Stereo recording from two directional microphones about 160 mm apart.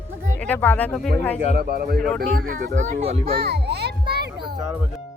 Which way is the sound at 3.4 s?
90° right.